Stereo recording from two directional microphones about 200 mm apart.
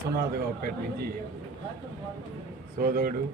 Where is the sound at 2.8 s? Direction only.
45° right (ahead or behind).